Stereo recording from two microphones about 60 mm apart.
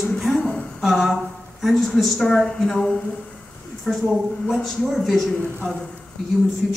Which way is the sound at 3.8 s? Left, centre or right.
Centre.